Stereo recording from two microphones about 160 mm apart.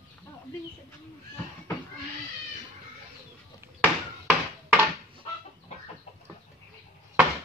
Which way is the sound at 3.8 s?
10° right (ahead or behind).